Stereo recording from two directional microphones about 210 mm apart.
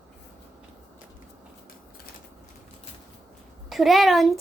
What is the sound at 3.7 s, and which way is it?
Speech, centre (ahead or behind).